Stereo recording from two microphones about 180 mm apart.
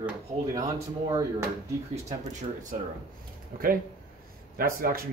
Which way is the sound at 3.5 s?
50° right (ahead or behind).